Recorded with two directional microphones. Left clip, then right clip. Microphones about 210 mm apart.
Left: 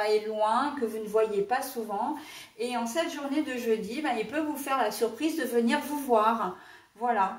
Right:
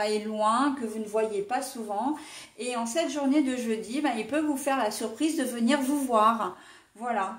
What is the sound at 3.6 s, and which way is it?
A woman's voice, 45° right (ahead or behind).